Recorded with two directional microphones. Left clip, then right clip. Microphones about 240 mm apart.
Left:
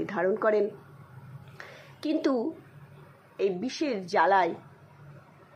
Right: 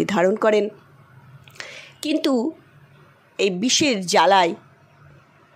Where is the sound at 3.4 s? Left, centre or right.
Right.